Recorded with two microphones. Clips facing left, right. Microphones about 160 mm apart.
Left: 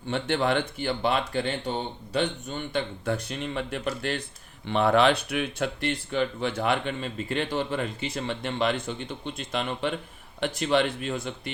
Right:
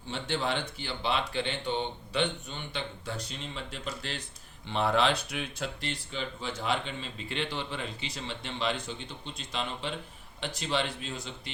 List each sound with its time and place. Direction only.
0.1 s speech: 55° left (ahead or behind)